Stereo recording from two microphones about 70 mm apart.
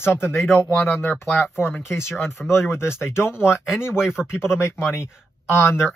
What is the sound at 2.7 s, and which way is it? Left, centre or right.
Speech, left.